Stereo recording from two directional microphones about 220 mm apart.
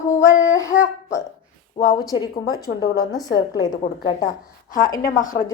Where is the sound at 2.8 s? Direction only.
15° left (ahead or behind).